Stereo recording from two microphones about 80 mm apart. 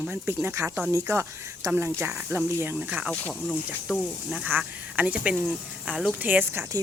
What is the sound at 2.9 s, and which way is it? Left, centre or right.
Speech, centre.